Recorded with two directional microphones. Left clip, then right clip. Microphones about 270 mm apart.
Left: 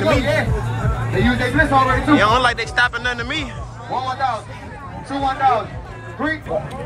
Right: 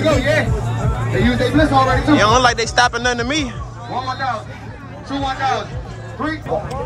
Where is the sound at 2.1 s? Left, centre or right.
Centre.